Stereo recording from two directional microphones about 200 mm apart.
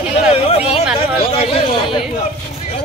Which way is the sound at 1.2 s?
30° left (ahead or behind).